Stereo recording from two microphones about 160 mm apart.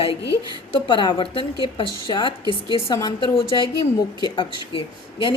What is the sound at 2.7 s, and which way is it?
A woman's voice, 30° left (ahead or behind).